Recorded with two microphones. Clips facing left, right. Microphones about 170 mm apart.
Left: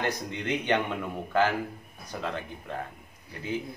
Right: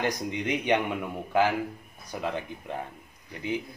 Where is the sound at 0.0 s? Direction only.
15° right (ahead or behind).